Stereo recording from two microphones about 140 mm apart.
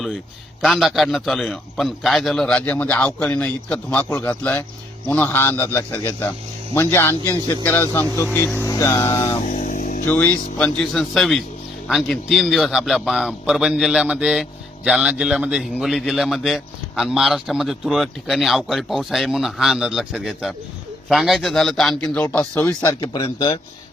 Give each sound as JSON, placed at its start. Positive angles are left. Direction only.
{"t": 0.6, "sound": "a man's voice", "side_deg": 0}
{"t": 9.1, "sound": "music", "side_deg": 25}
{"t": 9.5, "sound": "music", "side_deg": 70}
{"t": 10.1, "sound": "a man's voice", "side_deg": 10}
{"t": 23.0, "sound": "a man's voice", "side_deg": 30}